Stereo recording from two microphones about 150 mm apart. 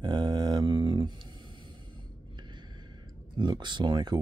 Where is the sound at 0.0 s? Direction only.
30° right (ahead or behind).